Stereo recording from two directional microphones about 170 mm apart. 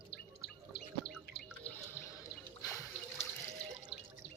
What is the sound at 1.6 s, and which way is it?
Drip, 10° left (ahead or behind).